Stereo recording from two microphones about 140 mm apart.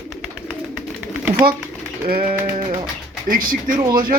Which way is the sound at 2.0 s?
90° right.